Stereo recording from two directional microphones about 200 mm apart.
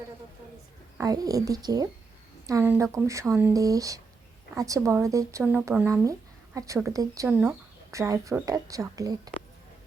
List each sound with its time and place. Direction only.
0.9 s speech: 20° right (ahead or behind)